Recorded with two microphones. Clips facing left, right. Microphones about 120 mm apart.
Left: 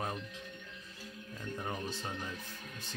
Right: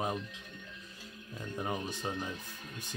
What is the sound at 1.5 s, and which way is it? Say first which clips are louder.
Speech: right 3 dB; 15° right (ahead or behind).